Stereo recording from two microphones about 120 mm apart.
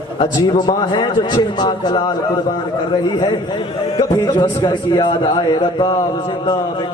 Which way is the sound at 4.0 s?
25° left (ahead or behind).